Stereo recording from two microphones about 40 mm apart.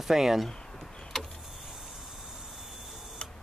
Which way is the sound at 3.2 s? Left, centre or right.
Left.